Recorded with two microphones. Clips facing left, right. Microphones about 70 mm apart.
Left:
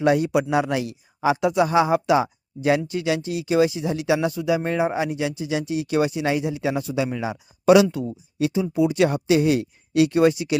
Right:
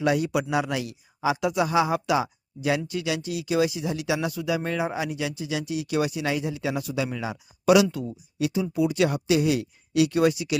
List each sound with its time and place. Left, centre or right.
0.0 s speech: left